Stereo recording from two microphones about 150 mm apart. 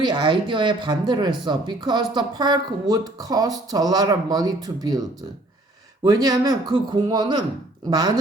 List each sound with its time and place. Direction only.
0.0 s speech: 30° right (ahead or behind)